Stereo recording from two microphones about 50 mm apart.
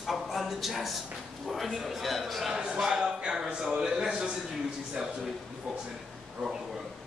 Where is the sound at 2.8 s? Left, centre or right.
Centre.